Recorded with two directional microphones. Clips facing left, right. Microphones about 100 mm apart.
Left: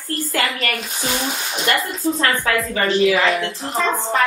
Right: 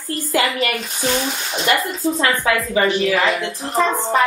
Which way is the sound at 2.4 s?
15° right (ahead or behind).